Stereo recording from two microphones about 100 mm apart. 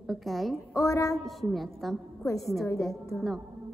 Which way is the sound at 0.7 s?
30° left (ahead or behind).